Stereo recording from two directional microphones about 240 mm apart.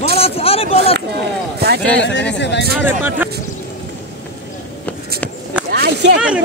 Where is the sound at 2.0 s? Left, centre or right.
Left.